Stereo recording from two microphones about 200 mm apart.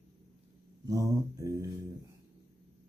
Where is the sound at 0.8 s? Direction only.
15° right (ahead or behind).